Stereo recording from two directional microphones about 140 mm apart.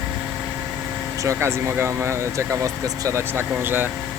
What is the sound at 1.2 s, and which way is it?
Speech, 20° right (ahead or behind).